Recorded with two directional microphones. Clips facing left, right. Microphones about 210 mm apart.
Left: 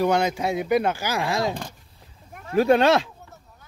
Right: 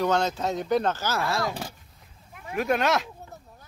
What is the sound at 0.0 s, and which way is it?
Speech, 10° left (ahead or behind).